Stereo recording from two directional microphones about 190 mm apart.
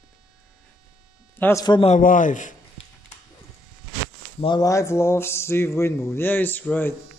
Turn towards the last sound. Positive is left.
turn(degrees=10)  # may be behind; listen again after turning